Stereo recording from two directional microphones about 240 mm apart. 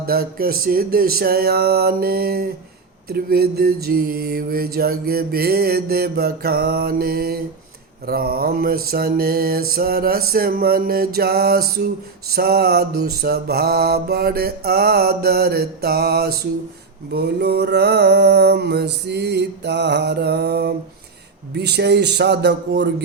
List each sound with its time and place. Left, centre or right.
0.0 s mantra: right